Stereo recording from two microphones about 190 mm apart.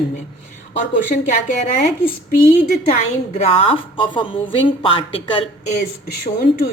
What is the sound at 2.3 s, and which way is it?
Speech, 45° left (ahead or behind).